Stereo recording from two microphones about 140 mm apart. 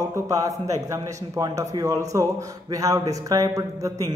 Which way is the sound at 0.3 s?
20° right (ahead or behind).